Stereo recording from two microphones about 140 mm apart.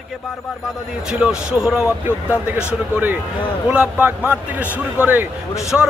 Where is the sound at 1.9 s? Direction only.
20° left (ahead or behind).